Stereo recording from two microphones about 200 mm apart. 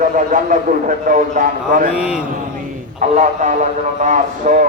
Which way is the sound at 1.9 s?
5° right (ahead or behind).